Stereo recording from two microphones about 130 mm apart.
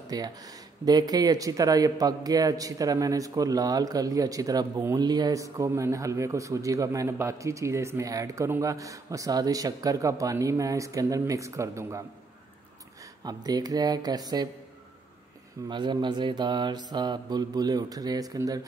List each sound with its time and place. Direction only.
0.1 s mantra: 30° right (ahead or behind)
0.8 s speech: 30° right (ahead or behind)
13.2 s mantra: 30° right (ahead or behind)
15.7 s mantra: 35° right (ahead or behind)